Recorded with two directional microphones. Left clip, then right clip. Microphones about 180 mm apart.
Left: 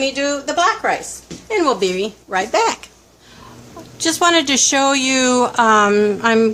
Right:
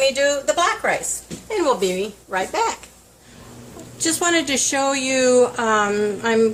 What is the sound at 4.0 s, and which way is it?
Speech, 35° left (ahead or behind).